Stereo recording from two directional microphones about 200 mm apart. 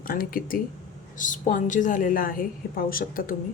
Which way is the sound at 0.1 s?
45° left (ahead or behind).